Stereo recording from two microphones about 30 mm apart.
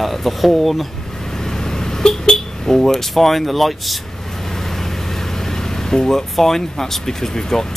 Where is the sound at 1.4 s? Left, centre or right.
Centre.